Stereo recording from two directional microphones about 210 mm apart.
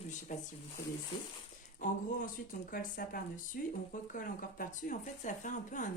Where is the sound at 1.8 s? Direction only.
40° left (ahead or behind).